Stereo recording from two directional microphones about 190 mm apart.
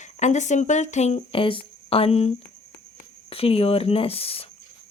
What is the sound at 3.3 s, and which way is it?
Speech, 30° left (ahead or behind).